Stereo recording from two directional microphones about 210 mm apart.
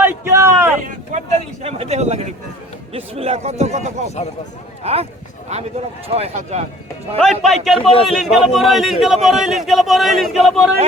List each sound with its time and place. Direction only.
0.0 s a sound: 10° right (ahead or behind)
0.8 s vehicle: 40° right (ahead or behind)
1.6 s a man's voice: 30° right (ahead or behind)
7.2 s speech: centre (ahead or behind)
7.8 s a man's voice: 25° left (ahead or behind)
8.0 s speech: centre (ahead or behind)